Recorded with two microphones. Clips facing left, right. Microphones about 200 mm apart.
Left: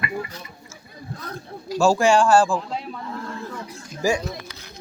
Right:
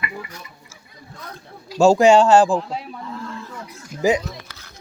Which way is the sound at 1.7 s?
20° right (ahead or behind).